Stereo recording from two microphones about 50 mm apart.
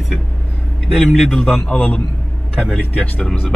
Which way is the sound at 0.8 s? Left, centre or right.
Centre.